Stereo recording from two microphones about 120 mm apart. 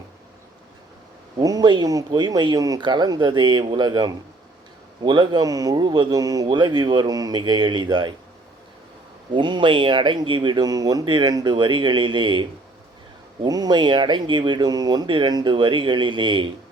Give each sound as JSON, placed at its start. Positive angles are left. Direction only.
{"t": 1.4, "sound": "speech", "side_deg": -30}
{"t": 9.3, "sound": "speech", "side_deg": -40}